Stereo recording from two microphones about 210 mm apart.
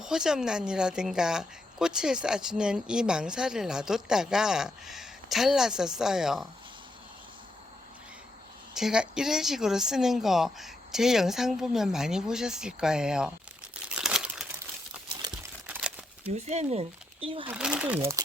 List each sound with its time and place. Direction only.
0.0 s speech: 5° right (ahead or behind)
8.7 s speech: 5° right (ahead or behind)
13.9 s crumpling: 5° right (ahead or behind)
15.6 s crumpling: 5° right (ahead or behind)
16.2 s speech: 30° right (ahead or behind)
17.5 s speech: 5° right (ahead or behind)